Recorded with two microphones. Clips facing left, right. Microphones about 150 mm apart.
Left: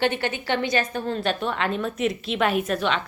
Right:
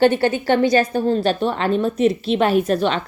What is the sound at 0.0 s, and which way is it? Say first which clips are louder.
A woman's voice: right 9 dB; 40° right (ahead or behind).